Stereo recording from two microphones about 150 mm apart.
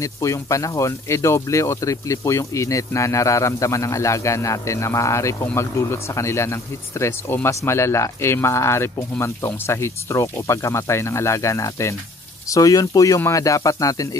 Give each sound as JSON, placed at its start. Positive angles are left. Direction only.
{"t": 0.0, "sound": "speech", "side_deg": 20}